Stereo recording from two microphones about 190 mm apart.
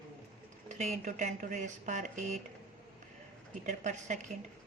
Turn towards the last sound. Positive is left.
turn(degrees=-40)  # may be behind; listen again after turning